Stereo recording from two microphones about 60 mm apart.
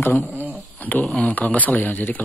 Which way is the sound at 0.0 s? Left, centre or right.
Left.